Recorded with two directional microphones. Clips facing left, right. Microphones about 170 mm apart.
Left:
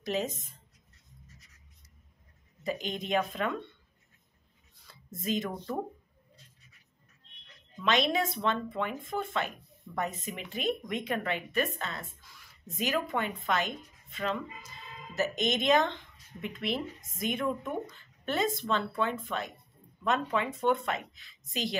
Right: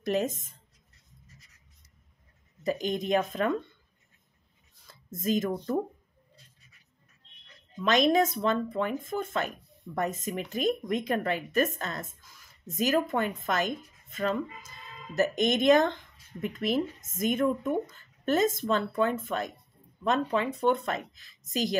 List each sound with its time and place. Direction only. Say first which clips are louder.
0.0 s speech: right 4 dB; 50° right (ahead or behind)
2.6 s speech: right 5 dB; 45° right (ahead or behind)
4.8 s speech: right 4 dB; 45° right (ahead or behind)
7.8 s speech: right 5 dB; 40° right (ahead or behind)